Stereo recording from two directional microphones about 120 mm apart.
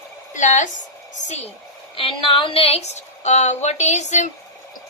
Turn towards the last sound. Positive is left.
turn(degrees=80)